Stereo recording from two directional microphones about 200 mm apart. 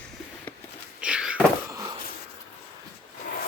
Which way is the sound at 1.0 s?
5° right (ahead or behind).